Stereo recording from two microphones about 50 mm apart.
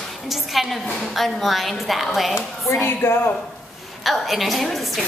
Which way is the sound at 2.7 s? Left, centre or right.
Left.